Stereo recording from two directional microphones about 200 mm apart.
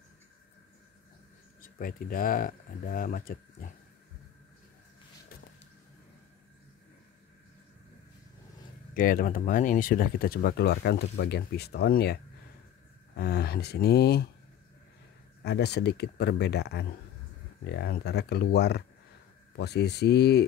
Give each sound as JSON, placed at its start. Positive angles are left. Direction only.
{"t": 1.6, "sound": "speech", "side_deg": 45}
{"t": 8.9, "sound": "speech", "side_deg": 45}
{"t": 15.4, "sound": "speech", "side_deg": 55}